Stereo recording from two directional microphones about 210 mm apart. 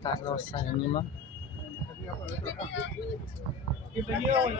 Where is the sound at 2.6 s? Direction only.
60° left (ahead or behind).